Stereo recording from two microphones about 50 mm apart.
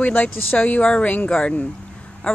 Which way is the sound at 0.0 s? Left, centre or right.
Left.